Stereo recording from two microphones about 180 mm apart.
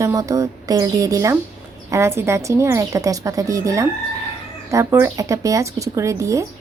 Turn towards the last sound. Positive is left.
turn(degrees=-15)  # may be behind; listen again after turning